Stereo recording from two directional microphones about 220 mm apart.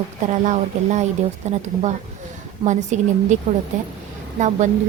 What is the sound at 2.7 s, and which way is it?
A woman's voice, 35° right (ahead or behind).